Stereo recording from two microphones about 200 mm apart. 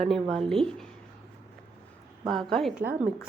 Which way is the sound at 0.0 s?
Centre (ahead or behind).